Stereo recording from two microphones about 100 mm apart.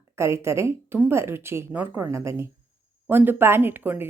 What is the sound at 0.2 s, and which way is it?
A woman's voice, 30° right (ahead or behind).